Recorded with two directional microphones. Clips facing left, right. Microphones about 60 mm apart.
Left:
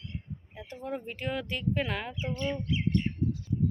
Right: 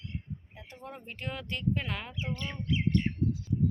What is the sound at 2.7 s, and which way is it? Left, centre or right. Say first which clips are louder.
Bird: right 4 dB; right.